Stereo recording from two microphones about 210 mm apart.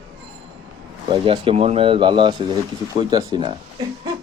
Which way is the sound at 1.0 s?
25° right (ahead or behind).